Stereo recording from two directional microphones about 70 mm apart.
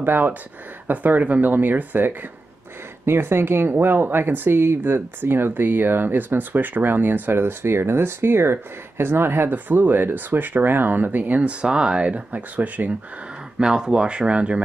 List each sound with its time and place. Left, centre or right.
0.0 s speech: right
11.6 s speech: centre
13.6 s speech: centre